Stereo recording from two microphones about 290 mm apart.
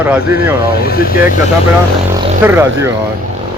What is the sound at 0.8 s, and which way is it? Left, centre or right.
Speech, left.